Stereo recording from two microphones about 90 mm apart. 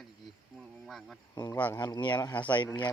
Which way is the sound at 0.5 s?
Centre (ahead or behind).